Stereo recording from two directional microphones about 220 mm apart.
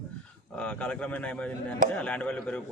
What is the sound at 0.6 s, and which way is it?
A man's voice, 5° left (ahead or behind).